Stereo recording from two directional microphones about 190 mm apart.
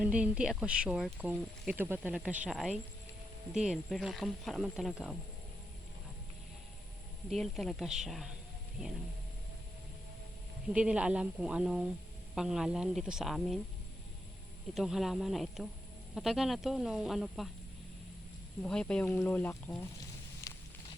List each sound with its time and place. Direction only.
0.0 s speech: 5° right (ahead or behind)
7.3 s speech: centre (ahead or behind)
10.7 s speech: 5° right (ahead or behind)
14.8 s speech: centre (ahead or behind)
18.6 s speech: 5° left (ahead or behind)